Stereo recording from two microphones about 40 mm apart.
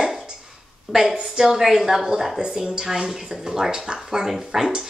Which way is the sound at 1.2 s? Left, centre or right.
Centre.